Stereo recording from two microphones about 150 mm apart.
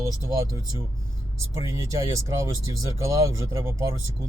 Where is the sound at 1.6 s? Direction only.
20° right (ahead or behind).